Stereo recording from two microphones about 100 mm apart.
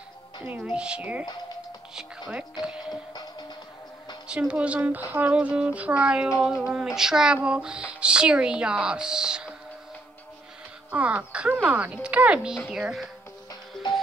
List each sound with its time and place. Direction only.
0.7 s speech: 10° right (ahead or behind)
3.1 s music: 45° left (ahead or behind)
4.3 s speech: 10° right (ahead or behind)
10.9 s a woman's voice: 15° right (ahead or behind)